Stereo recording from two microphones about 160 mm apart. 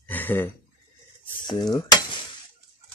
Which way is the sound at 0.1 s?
10° left (ahead or behind).